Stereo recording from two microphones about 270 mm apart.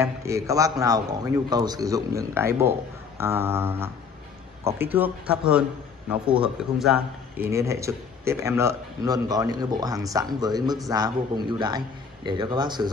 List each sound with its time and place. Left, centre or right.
0.0 s a man's voice: centre